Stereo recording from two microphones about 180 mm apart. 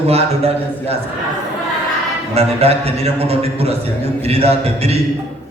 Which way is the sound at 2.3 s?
35° right (ahead or behind).